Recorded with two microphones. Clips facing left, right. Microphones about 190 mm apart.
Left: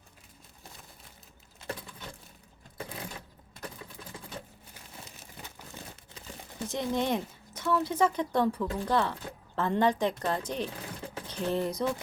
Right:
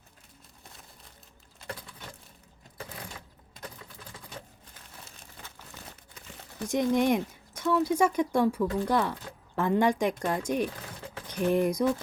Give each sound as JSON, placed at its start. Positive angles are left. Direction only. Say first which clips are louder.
{"t": 5.7, "sound": "crumpling", "louder": "left 2 dB", "side_deg": 30}
{"t": 6.7, "sound": "speech", "louder": "right 5 dB", "side_deg": -15}
{"t": 11.3, "sound": "a sound", "louder": "right 5 dB", "side_deg": -15}